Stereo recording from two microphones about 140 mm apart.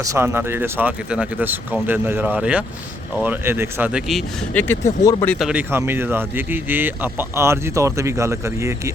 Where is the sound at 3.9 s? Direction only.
Centre (ahead or behind).